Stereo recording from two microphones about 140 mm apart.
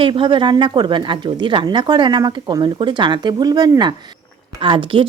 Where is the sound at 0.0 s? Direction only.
35° right (ahead or behind).